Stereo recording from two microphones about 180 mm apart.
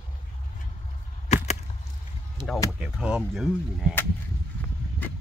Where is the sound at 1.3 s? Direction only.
40° left (ahead or behind).